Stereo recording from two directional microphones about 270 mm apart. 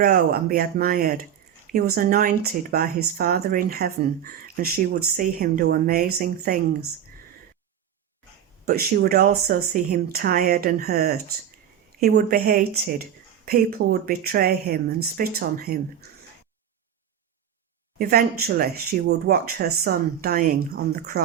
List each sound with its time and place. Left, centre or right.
0.0 s speech: right
8.6 s speech: right
17.9 s speech: right